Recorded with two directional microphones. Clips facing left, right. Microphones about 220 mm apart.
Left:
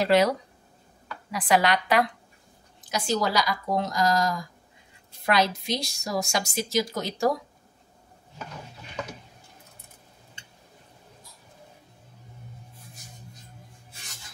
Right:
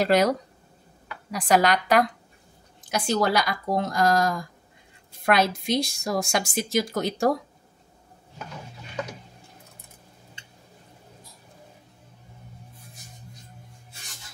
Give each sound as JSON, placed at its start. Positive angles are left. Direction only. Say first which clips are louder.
{"t": 0.0, "sound": "a woman's voice", "louder": "even", "side_deg": -45}
{"t": 1.3, "sound": "a woman's voice", "louder": "right 2 dB", "side_deg": -45}
{"t": 2.9, "sound": "a woman's voice", "louder": "right 3 dB", "side_deg": -55}